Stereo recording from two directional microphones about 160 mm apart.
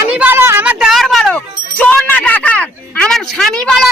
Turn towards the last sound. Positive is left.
turn(degrees=0)  # may be behind; listen again after turning